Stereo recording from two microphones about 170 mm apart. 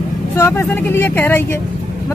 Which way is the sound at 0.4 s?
15° left (ahead or behind).